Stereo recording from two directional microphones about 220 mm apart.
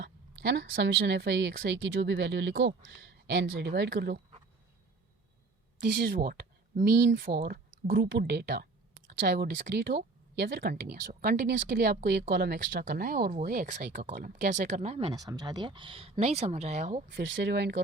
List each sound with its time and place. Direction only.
0.0 s a woman's voice: 50° right (ahead or behind)
5.9 s a woman's voice: 45° right (ahead or behind)
17.1 s a woman's voice: 55° right (ahead or behind)